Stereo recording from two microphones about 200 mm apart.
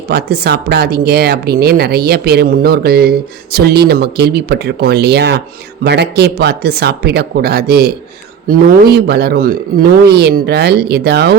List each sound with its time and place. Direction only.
0.1 s speech: 50° right (ahead or behind)